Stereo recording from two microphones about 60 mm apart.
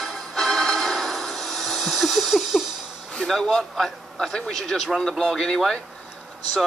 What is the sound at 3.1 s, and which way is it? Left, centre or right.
A man's voice, centre.